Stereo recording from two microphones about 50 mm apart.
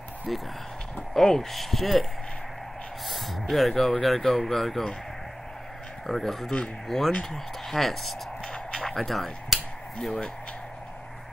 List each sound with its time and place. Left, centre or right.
0.3 s speech: centre
3.1 s a sound: centre
4.0 s speech: centre
6.0 s speech: centre
8.7 s a sound: centre
10.0 s speech: centre